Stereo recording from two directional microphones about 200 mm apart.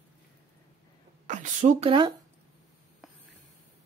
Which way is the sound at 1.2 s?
35° right (ahead or behind).